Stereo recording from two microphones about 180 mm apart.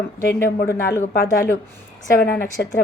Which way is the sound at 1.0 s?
55° left (ahead or behind).